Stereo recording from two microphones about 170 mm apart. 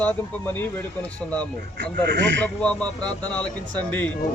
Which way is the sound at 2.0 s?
90° right.